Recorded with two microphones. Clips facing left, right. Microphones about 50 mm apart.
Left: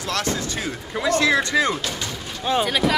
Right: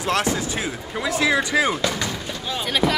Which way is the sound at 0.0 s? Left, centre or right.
Centre.